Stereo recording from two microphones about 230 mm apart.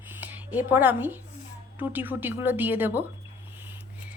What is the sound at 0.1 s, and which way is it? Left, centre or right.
A woman's voice, centre.